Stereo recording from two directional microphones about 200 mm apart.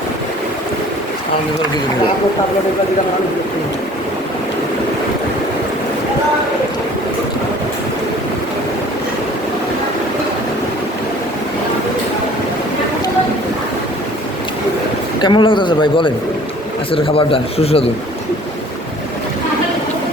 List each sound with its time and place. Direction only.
15.2 s a man's voice: 25° left (ahead or behind)